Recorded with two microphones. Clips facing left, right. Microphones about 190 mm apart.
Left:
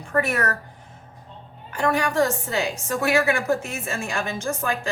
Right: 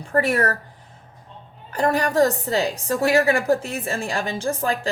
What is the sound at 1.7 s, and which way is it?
A woman's voice, 35° right (ahead or behind).